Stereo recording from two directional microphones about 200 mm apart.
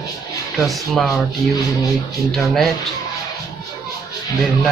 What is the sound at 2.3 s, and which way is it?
Speech, centre (ahead or behind).